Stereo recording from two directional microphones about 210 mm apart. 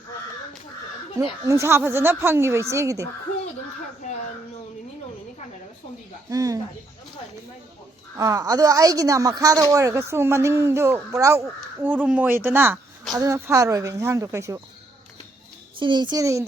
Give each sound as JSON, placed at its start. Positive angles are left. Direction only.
{"t": 1.5, "sound": "speech", "side_deg": -15}
{"t": 6.3, "sound": "speech", "side_deg": -15}
{"t": 8.2, "sound": "speech", "side_deg": -15}
{"t": 15.8, "sound": "a child's voice", "side_deg": -20}